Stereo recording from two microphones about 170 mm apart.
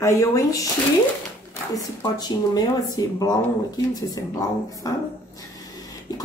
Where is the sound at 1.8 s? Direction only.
25° left (ahead or behind).